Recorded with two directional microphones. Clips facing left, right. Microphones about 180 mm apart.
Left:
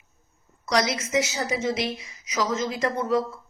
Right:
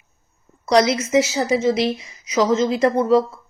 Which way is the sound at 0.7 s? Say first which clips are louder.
Right 8 dB; 25° right (ahead or behind).